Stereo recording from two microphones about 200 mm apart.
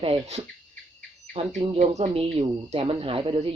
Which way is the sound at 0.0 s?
30° right (ahead or behind).